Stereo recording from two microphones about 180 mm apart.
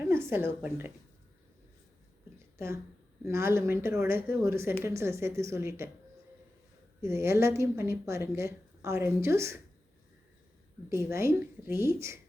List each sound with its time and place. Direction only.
0.0 s a woman's voice: 15° right (ahead or behind)
3.2 s speech: 15° right (ahead or behind)
7.0 s speech: 15° right (ahead or behind)
10.8 s speech: 15° right (ahead or behind)